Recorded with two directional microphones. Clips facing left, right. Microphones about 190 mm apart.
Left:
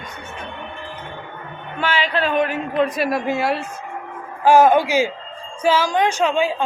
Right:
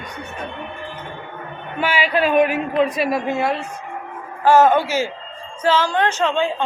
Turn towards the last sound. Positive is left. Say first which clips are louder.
# left 1 dB
turn(degrees=10)  # may be behind; listen again after turning